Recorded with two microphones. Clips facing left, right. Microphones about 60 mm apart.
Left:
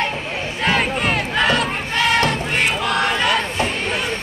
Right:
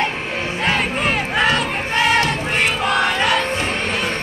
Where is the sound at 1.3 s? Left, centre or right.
Centre.